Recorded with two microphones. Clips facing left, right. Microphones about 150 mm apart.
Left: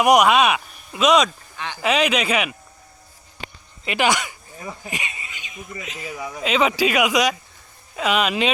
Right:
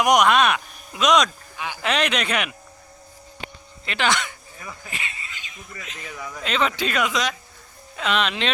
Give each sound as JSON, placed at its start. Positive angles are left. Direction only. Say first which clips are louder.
{"t": 0.0, "sound": "speech", "louder": "left 2 dB", "side_deg": 5}
{"t": 1.5, "sound": "speech", "louder": "right 1 dB", "side_deg": -10}
{"t": 1.8, "sound": "speech", "louder": "left 4 dB", "side_deg": 5}
{"t": 3.8, "sound": "speech", "louder": "left 3 dB", "side_deg": 10}
{"t": 4.5, "sound": "speech", "louder": "left 4 dB", "side_deg": 30}
{"t": 4.9, "sound": "a sound", "louder": "left 3 dB", "side_deg": 15}
{"t": 5.8, "sound": "speech", "louder": "left 4 dB", "side_deg": 5}